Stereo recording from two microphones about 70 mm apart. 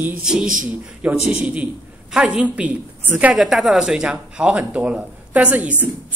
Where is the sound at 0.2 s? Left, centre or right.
Centre.